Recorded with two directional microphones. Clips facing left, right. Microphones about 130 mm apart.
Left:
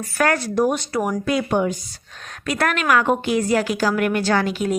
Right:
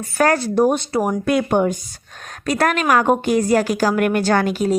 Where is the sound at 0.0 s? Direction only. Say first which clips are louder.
Right 3 dB; 30° right (ahead or behind).